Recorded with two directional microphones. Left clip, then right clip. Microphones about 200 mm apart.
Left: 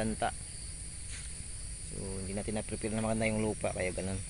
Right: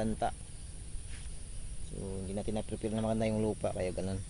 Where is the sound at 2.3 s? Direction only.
15° right (ahead or behind).